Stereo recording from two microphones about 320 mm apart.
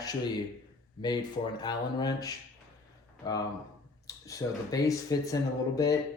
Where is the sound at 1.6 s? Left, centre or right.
Centre.